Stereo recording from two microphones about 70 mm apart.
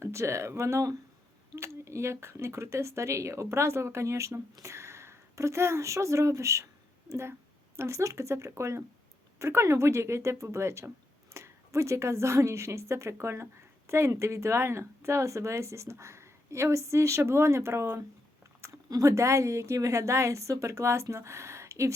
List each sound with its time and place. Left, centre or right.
0.0 s a woman's voice: right